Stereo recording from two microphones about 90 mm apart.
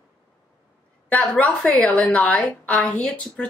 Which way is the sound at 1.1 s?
15° left (ahead or behind).